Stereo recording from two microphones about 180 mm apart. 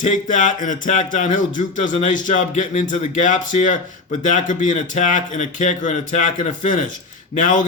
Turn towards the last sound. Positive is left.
turn(degrees=45)  # may be behind; listen again after turning